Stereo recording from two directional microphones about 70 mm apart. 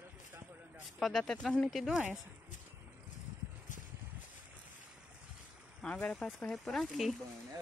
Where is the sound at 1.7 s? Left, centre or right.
Centre.